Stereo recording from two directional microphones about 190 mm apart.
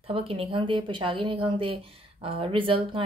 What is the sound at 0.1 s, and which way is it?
A woman's voice, 30° right (ahead or behind).